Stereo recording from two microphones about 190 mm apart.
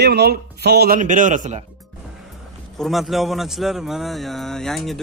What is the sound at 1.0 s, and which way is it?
Speech, 45° right (ahead or behind).